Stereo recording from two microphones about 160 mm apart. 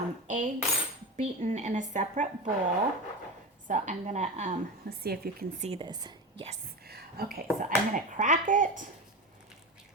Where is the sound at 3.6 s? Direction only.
50° right (ahead or behind).